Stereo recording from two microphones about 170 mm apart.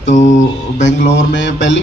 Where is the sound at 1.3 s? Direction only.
90° left.